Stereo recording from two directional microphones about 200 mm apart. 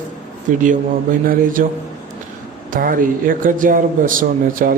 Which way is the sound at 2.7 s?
45° right (ahead or behind).